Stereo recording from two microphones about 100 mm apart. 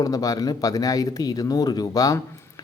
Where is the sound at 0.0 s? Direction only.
35° left (ahead or behind).